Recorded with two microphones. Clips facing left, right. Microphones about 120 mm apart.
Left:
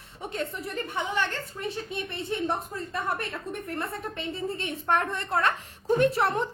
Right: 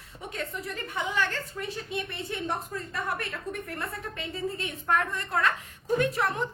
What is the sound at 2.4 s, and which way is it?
A woman's voice, 25° left (ahead or behind).